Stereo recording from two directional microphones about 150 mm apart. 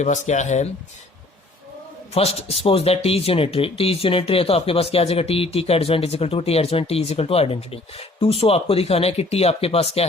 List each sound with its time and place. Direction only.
0.0 s speech: 50° left (ahead or behind)
2.1 s speech: 40° left (ahead or behind)